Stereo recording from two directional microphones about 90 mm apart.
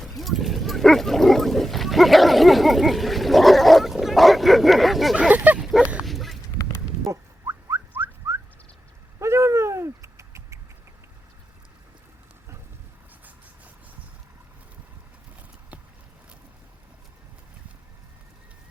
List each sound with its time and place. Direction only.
0.2 s wild animals: centre (ahead or behind)
5.3 s a sound: 15° right (ahead or behind)
6.0 s dog: centre (ahead or behind)
7.0 s rodents: 35° right (ahead or behind)
7.9 s whistling: 25° right (ahead or behind)
9.1 s a sound: 30° right (ahead or behind)